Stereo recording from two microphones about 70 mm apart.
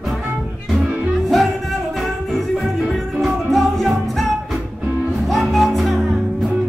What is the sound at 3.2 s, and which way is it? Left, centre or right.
Music, centre.